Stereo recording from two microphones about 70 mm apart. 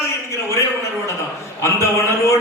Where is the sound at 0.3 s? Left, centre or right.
Left.